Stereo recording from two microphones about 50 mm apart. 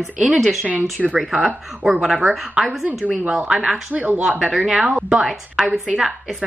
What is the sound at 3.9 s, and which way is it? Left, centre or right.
Speech, right.